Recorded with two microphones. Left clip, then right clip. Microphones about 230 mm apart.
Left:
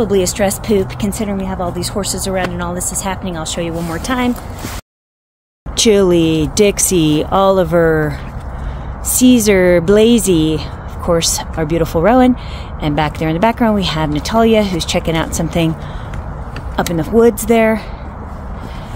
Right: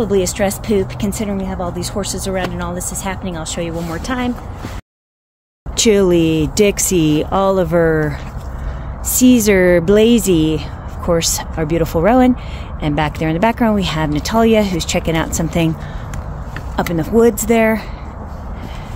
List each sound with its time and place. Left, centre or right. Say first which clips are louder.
0.0 s a woman's voice: left 2 dB; centre
4.0 s speech: left 5 dB; left
5.8 s speech: left 2 dB; centre
9.2 s speech: left 1 dB; centre
16.7 s speech: left 1 dB; centre